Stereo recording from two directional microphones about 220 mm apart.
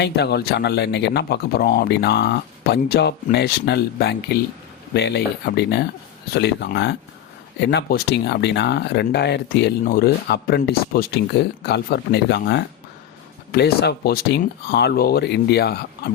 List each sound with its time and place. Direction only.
0.0 s speech: 50° left (ahead or behind)